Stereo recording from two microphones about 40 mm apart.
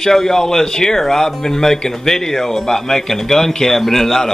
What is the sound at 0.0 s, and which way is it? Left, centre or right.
Speech, centre.